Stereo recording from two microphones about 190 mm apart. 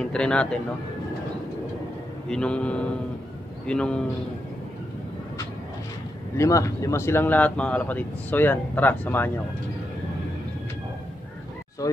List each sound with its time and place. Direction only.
0.0 s speech: 5° left (ahead or behind)
2.2 s speech: 5° left (ahead or behind)
6.3 s speech: 15° left (ahead or behind)
11.8 s speech: 15° left (ahead or behind)